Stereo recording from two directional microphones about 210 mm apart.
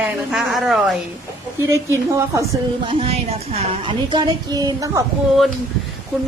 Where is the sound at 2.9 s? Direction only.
30° right (ahead or behind).